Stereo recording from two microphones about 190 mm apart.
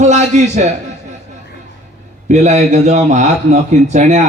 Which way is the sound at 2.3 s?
35° right (ahead or behind).